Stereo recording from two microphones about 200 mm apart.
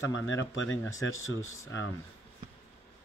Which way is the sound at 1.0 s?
85° left.